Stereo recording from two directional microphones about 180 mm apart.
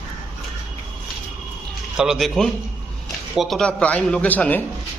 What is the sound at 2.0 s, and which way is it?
A man's voice, centre (ahead or behind).